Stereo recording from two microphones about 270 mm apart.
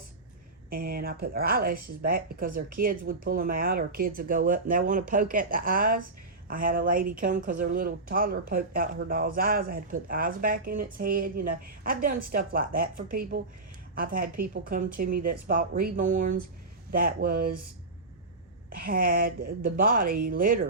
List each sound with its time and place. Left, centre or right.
0.7 s speech: right
18.7 s speech: right